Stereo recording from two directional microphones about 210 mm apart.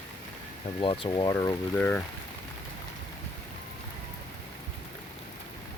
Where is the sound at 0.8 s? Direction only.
25° left (ahead or behind); by 2.0 s 5° left (ahead or behind).